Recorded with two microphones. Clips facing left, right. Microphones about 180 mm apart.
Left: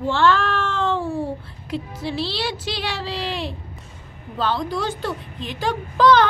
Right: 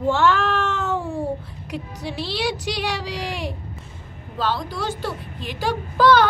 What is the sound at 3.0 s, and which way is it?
A child's voice, 10° right (ahead or behind).